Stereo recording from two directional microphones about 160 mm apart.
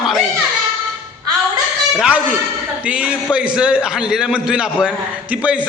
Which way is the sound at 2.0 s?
10° right (ahead or behind).